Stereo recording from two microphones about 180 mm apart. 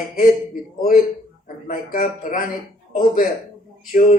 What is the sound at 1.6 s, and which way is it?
Speech, 50° left (ahead or behind).